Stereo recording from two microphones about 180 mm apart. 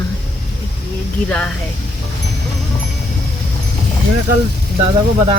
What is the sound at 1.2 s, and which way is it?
Speech, 5° left (ahead or behind).